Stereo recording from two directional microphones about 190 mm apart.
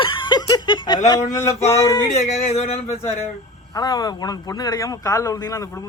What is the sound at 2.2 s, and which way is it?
Speech, 35° left (ahead or behind).